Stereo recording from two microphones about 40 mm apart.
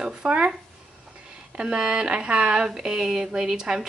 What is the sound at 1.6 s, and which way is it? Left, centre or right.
Speech, right.